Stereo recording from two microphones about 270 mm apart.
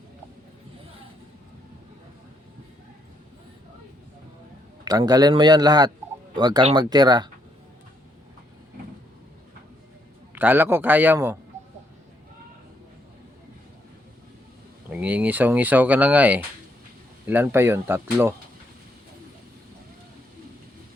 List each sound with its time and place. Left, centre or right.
4.9 s speech: centre
10.3 s speech: centre
14.8 s speech: centre